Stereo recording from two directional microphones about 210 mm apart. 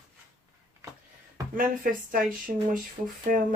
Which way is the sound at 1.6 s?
40° right (ahead or behind).